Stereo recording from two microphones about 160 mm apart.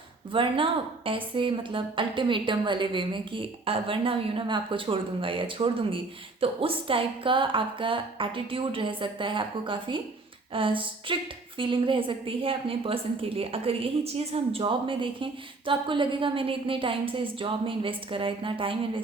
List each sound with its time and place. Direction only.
0.3 s a woman's voice: 35° right (ahead or behind)